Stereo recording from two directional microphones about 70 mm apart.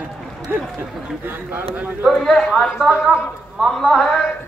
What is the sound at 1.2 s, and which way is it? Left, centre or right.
Speech, right.